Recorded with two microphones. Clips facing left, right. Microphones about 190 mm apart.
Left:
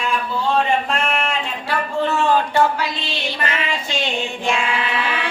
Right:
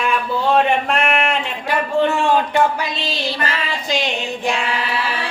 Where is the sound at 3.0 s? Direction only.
35° right (ahead or behind).